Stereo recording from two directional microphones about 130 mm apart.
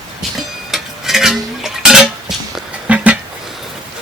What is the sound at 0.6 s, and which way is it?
Dishes, centre (ahead or behind).